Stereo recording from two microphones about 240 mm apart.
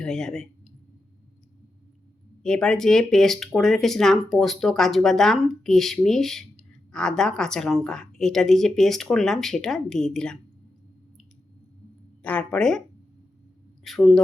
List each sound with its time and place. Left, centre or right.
0.0 s speech: centre
2.4 s speech: centre
12.2 s speech: centre
13.8 s speech: centre